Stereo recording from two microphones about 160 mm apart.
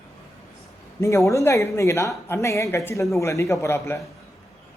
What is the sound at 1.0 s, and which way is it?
Speech, 20° left (ahead or behind).